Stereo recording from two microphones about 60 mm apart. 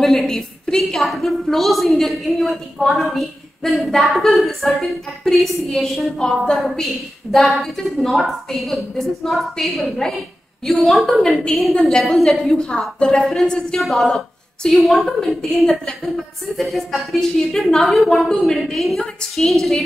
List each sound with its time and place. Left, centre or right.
0.0 s a woman's voice: centre
13.7 s a woman's voice: centre